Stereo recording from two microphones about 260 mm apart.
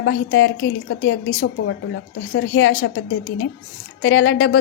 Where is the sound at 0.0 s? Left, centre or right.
Left.